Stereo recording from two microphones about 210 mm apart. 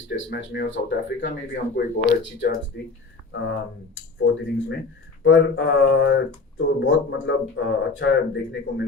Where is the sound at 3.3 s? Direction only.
60° left (ahead or behind).